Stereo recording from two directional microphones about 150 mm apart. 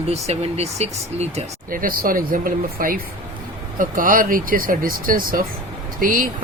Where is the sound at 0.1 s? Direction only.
45° right (ahead or behind).